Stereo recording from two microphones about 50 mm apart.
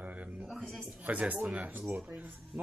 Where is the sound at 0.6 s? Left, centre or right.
Centre.